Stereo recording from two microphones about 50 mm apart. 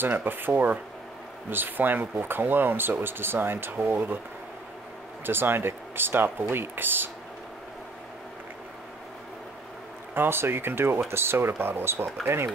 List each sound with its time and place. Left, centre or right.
0.0 s speech: right
5.2 s speech: right
10.1 s speech: right